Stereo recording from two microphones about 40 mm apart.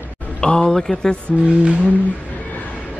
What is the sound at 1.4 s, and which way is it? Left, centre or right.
Humming, right.